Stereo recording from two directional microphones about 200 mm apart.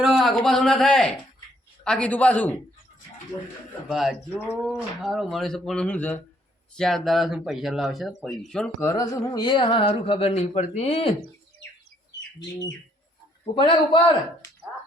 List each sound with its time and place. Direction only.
0.0 s speech: centre (ahead or behind)
3.8 s speech: centre (ahead or behind)
8.9 s speech: 15° left (ahead or behind)
13.4 s speech: 25° left (ahead or behind)